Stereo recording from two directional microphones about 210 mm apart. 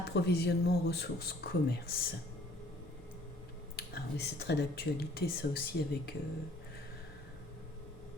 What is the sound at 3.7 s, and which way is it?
Speech, 50° left (ahead or behind).